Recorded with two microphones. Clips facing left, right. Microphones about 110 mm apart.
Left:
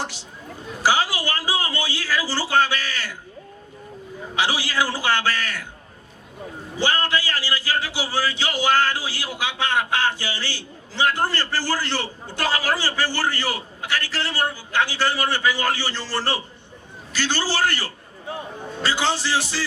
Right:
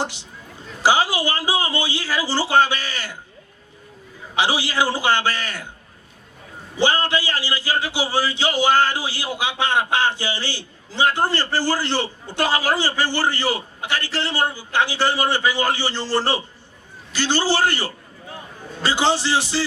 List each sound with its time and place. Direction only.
0.0 s a man's voice: 20° right (ahead or behind)
4.4 s a man's voice: 20° right (ahead or behind)
6.7 s a man's voice: 20° right (ahead or behind)